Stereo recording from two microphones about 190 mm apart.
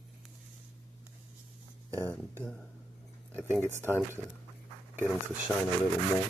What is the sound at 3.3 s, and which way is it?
Speech, 10° right (ahead or behind).